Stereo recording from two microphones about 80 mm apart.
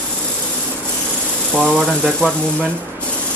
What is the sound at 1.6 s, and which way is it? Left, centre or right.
Speech, centre.